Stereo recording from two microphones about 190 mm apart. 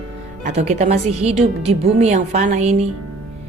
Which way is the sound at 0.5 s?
35° right (ahead or behind).